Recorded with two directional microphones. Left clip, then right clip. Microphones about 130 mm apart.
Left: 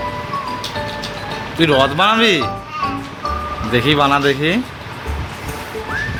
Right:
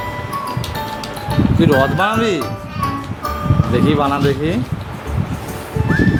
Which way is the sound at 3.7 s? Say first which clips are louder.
Left 3 dB; 5° left (ahead or behind).